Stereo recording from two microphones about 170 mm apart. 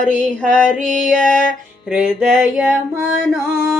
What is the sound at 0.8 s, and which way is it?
Female singing, 50° right (ahead or behind).